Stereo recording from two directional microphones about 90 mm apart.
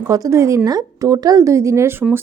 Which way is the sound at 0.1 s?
35° right (ahead or behind).